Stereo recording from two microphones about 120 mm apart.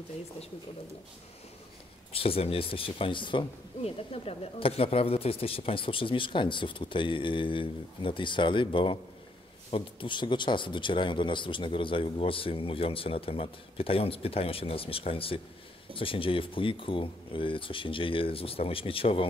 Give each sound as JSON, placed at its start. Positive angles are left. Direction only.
{"t": 2.1, "sound": "speech", "side_deg": 50}